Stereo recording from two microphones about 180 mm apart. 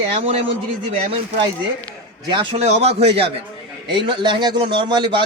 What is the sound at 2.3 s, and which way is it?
Speech, 30° right (ahead or behind).